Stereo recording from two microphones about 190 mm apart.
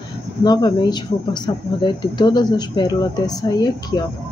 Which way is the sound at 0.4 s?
20° left (ahead or behind).